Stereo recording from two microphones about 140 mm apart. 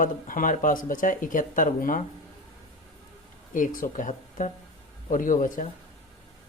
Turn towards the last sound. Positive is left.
turn(degrees=70)  # may be behind; listen again after turning